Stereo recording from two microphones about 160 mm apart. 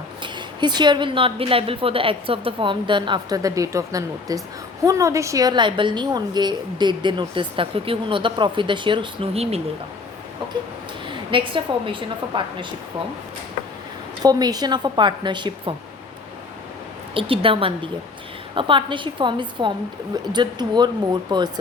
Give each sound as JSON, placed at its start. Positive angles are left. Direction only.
{"t": 0.2, "sound": "a woman's voice", "side_deg": -30}
{"t": 11.3, "sound": "a woman's voice", "side_deg": -30}
{"t": 14.2, "sound": "a woman's voice", "side_deg": -25}
{"t": 17.2, "sound": "a woman's voice", "side_deg": -35}